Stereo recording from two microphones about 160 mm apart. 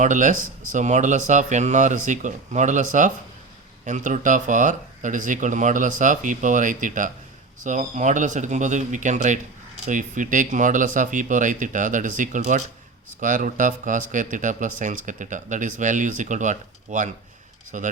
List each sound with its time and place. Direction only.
0.0 s speech: 50° right (ahead or behind)